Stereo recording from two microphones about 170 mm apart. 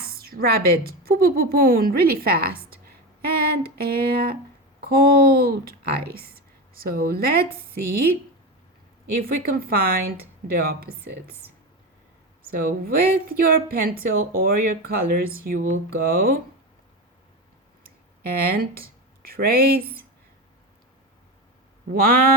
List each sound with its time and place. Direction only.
0.0 s a woman's voice: 60° right (ahead or behind)
3.2 s a sound: 65° right (ahead or behind)
4.9 s a woman's voice: 65° right (ahead or behind)
9.1 s a woman's voice: 60° right (ahead or behind)
12.5 s a woman's voice: 60° right (ahead or behind)
17.8 s speech: 65° right (ahead or behind)
21.9 s a woman's voice: 55° right (ahead or behind)